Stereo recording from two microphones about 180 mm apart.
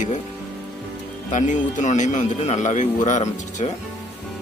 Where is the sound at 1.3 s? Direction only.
45° left (ahead or behind).